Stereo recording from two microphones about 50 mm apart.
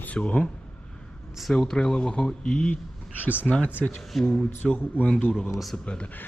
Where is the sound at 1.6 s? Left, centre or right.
Centre.